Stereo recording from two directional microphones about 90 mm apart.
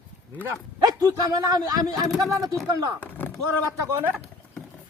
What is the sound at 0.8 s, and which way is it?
Speech, 45° right (ahead or behind).